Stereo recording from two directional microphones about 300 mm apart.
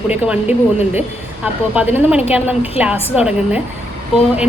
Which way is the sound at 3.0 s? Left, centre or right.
Centre.